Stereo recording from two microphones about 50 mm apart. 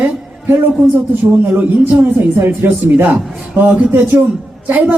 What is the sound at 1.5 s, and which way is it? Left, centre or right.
A man's voice, right.